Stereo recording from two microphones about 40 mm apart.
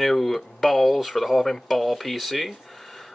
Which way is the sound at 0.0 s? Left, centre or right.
Centre.